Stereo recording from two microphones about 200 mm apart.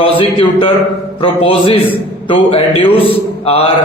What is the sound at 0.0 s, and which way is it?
A man's voice, 25° left (ahead or behind).